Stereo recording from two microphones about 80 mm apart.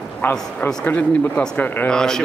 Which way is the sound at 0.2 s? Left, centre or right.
Left.